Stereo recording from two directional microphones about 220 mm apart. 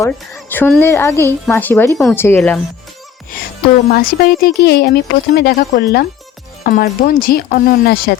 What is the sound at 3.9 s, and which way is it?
Speech, 45° left (ahead or behind).